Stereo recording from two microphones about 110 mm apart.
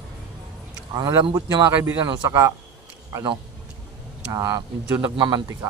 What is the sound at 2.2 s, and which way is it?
Speech, 30° right (ahead or behind).